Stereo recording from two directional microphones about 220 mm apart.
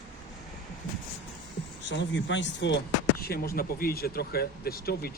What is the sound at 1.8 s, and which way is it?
Speech, 55° left (ahead or behind).